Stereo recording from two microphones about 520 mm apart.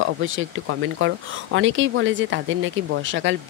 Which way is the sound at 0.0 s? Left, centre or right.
Right.